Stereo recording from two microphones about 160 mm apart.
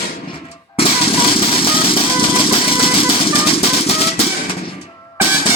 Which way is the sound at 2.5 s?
35° left (ahead or behind).